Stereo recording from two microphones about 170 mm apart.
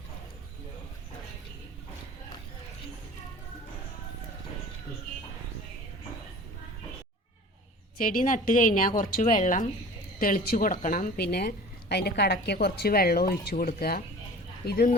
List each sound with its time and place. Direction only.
7.9 s a woman's voice: 50° left (ahead or behind); by 14.8 s 65° left (ahead or behind)